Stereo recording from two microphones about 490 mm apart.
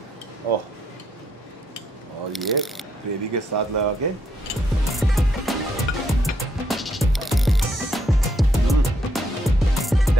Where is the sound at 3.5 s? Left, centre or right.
Right.